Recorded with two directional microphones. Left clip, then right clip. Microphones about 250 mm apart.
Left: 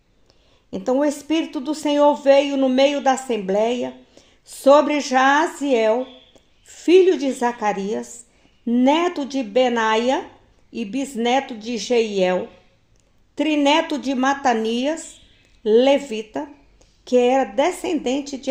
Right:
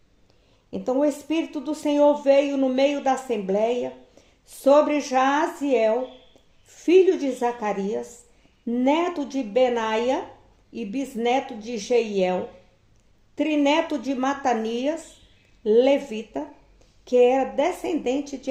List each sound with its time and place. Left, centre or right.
0.7 s a woman's voice: left